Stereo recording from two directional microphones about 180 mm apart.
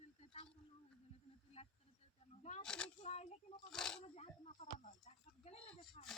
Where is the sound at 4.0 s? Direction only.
35° left (ahead or behind).